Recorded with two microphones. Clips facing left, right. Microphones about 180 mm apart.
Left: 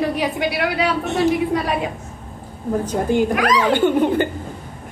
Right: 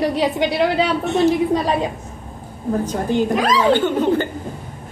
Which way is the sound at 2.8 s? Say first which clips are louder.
Left 2 dB; 10° left (ahead or behind).